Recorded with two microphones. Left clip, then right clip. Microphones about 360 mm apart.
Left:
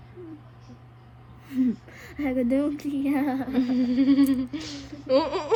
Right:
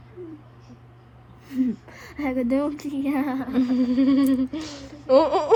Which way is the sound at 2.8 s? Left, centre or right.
Right.